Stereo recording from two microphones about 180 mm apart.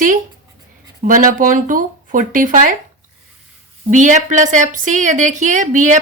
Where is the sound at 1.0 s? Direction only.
50° right (ahead or behind).